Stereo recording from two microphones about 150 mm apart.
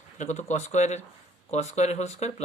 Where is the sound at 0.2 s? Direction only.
50° left (ahead or behind).